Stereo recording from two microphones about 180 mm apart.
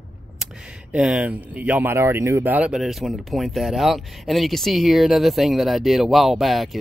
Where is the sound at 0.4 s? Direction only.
5° right (ahead or behind).